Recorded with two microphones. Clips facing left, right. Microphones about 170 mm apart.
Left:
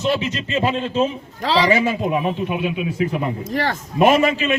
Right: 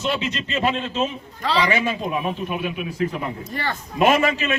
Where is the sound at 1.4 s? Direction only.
90° left.